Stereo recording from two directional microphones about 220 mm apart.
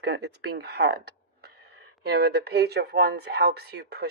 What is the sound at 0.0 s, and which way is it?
Speech, 50° right (ahead or behind).